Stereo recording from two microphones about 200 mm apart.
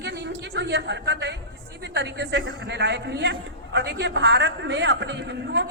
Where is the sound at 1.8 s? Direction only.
60° right (ahead or behind).